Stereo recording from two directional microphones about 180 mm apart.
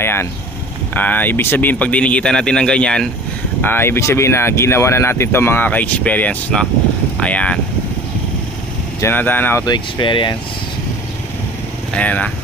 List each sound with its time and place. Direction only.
0.0 s speech: 15° left (ahead or behind)
9.0 s speech: 10° left (ahead or behind)
9.6 s speech: 25° left (ahead or behind)
11.9 s speech: 10° left (ahead or behind)